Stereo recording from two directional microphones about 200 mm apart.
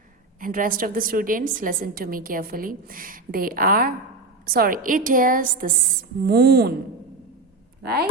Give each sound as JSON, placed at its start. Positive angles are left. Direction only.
{"t": 0.3, "sound": "a woman's voice", "side_deg": -45}